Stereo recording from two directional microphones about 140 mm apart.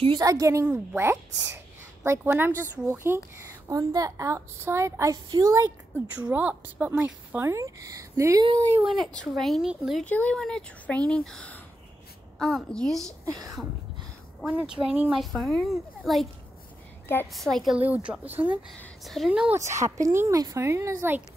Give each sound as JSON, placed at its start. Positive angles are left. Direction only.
{"t": 0.0, "sound": "a woman's voice", "side_deg": -30}
{"t": 6.1, "sound": "speech", "side_deg": -10}
{"t": 8.9, "sound": "speech", "side_deg": 5}
{"t": 10.0, "sound": "a woman's voice", "side_deg": 10}
{"t": 14.4, "sound": "speech", "side_deg": -10}
{"t": 15.3, "sound": "speech", "side_deg": 5}
{"t": 17.3, "sound": "speech", "side_deg": 0}
{"t": 17.7, "sound": "speech", "side_deg": -10}
{"t": 19.5, "sound": "a woman's voice", "side_deg": -20}